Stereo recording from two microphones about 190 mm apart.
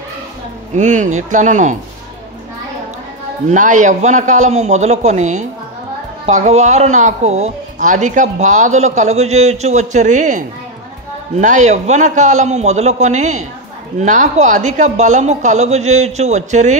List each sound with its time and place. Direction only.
0.7 s speech: 40° right (ahead or behind)
3.4 s speech: 40° right (ahead or behind)